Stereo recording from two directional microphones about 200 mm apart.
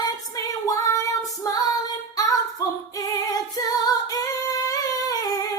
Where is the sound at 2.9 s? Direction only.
15° left (ahead or behind).